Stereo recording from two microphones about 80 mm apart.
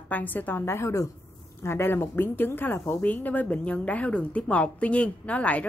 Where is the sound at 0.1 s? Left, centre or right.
Left.